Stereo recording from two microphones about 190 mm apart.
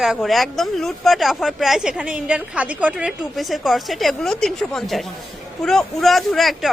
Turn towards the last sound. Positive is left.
turn(degrees=0)  # may be behind; listen again after turning